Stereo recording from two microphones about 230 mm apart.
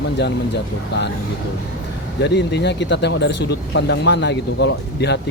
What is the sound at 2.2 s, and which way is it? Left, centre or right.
Speech, left.